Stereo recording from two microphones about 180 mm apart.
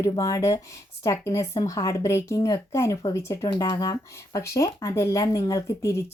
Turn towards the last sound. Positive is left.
turn(degrees=15)  # may be behind; listen again after turning